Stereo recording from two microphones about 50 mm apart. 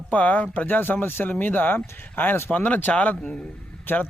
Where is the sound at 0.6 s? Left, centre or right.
Left.